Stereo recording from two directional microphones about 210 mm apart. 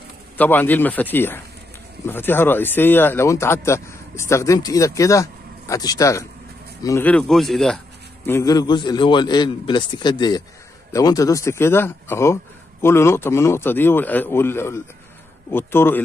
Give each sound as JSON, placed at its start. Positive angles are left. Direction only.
{"t": 0.4, "sound": "speech", "side_deg": 10}
{"t": 8.3, "sound": "a man's voice", "side_deg": 15}